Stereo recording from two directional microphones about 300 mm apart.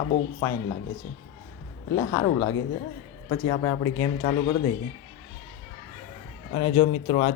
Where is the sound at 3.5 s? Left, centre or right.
Centre.